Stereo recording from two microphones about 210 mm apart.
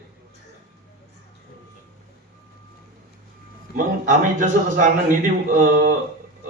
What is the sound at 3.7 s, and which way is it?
A man's voice, 40° right (ahead or behind).